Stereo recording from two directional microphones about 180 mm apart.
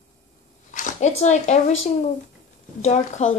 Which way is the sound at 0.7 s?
40° left (ahead or behind).